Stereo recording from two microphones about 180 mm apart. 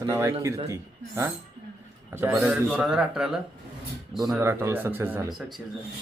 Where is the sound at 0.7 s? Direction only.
15° right (ahead or behind).